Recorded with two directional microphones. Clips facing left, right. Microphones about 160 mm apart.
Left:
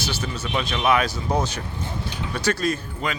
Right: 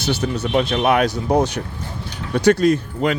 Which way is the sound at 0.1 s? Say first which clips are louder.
Right 12 dB; 65° right (ahead or behind).